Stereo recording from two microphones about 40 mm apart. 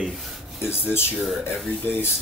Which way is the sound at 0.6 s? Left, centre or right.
Left.